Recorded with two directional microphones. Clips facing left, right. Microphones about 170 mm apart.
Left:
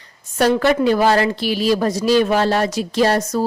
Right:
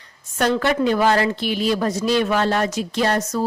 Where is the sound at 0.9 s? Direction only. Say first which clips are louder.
Left 2 dB; 35° left (ahead or behind).